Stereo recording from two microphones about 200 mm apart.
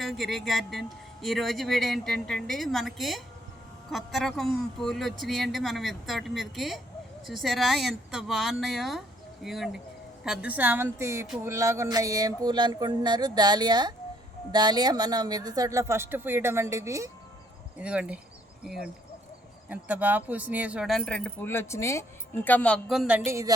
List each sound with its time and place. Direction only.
0.0 s speech: centre (ahead or behind)
11.4 s a sound: 15° right (ahead or behind)
14.5 s speech: 20° right (ahead or behind)